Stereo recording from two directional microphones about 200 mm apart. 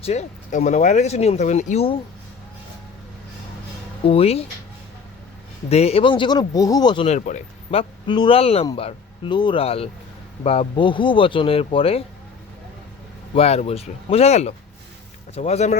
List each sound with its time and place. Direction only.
0.0 s speech: 35° left (ahead or behind)
4.0 s speech: 30° left (ahead or behind)
5.6 s speech: 30° left (ahead or behind)
13.3 s speech: 30° left (ahead or behind)